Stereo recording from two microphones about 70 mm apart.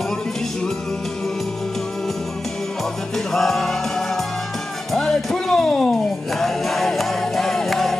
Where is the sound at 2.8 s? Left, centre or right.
Centre.